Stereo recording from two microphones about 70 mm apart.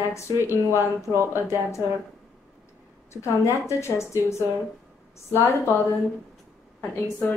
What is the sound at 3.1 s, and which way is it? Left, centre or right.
A woman's voice, left.